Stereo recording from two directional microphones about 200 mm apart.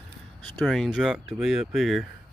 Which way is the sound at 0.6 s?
Centre (ahead or behind).